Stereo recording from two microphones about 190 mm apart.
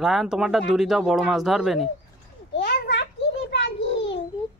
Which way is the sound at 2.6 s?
65° left (ahead or behind).